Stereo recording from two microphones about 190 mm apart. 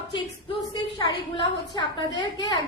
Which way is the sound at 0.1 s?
25° left (ahead or behind).